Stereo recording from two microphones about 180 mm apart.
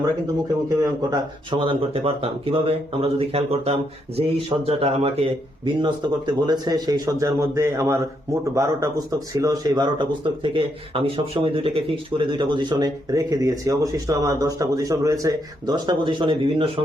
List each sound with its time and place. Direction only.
0.8 s speech: 25° right (ahead or behind)